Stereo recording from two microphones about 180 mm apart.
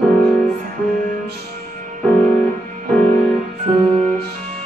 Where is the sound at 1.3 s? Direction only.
55° right (ahead or behind).